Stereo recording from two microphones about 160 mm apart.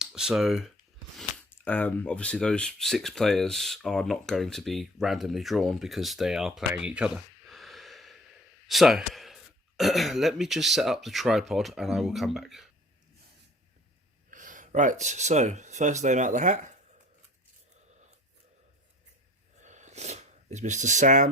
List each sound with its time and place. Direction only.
0.0 s speech: 5° right (ahead or behind)
1.5 s speech: 10° left (ahead or behind)
14.3 s speech: 55° right (ahead or behind)
19.6 s a sound: 50° right (ahead or behind)